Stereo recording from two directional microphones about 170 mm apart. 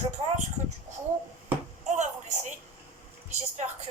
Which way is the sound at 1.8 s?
45° right (ahead or behind).